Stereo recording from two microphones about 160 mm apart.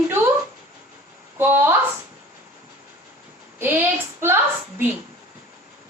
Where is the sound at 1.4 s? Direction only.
15° right (ahead or behind).